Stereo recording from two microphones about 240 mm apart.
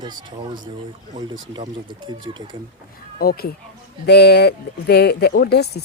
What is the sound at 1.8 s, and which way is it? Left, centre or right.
Speech, centre.